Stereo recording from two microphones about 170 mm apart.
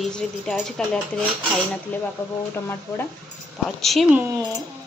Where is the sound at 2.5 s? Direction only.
15° left (ahead or behind).